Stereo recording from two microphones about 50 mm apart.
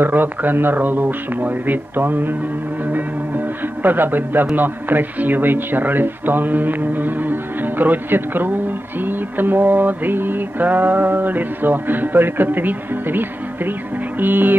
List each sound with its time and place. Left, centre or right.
0.0 s a man's voice: right